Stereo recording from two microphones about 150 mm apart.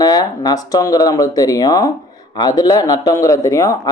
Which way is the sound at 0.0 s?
25° left (ahead or behind).